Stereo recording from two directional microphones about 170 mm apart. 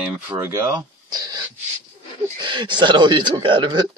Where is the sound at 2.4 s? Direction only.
25° right (ahead or behind).